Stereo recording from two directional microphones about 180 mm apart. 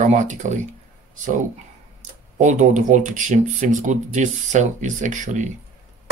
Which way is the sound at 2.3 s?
45° right (ahead or behind).